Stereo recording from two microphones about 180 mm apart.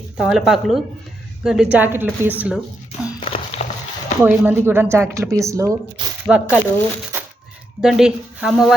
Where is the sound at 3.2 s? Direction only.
35° left (ahead or behind).